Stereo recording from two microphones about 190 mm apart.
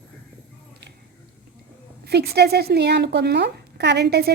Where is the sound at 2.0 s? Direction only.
60° right (ahead or behind).